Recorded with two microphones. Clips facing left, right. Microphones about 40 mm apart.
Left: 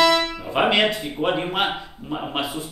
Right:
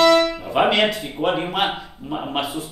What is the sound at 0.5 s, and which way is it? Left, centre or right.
Music, centre.